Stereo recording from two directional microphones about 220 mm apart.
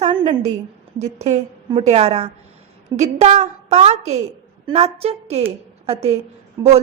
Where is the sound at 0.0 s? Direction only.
30° right (ahead or behind).